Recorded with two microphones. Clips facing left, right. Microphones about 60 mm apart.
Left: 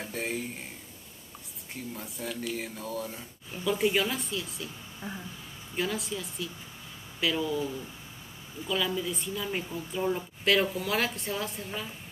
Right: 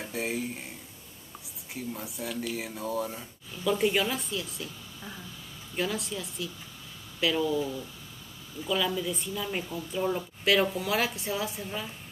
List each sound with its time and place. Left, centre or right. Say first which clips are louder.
0.0 s speech: right 1 dB; centre
1.8 s a woman's voice: right 2 dB; centre
4.6 s a woman's voice: left 2 dB; centre
5.8 s a woman's voice: even; centre